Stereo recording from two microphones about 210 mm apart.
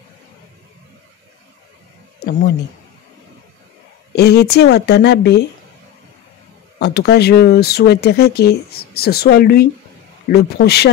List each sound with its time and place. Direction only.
2.1 s speech: 55° left (ahead or behind)
4.1 s speech: 50° left (ahead or behind)
6.8 s speech: 50° left (ahead or behind)